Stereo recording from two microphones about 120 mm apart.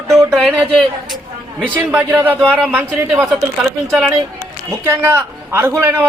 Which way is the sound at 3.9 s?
Centre (ahead or behind).